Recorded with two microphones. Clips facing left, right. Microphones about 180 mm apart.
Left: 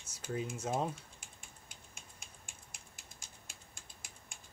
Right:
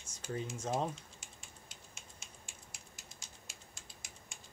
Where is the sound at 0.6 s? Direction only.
5° left (ahead or behind).